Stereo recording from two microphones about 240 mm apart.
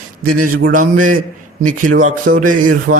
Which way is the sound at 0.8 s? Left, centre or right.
Right.